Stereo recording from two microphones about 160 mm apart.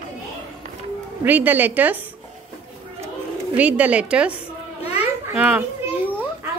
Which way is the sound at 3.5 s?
10° right (ahead or behind).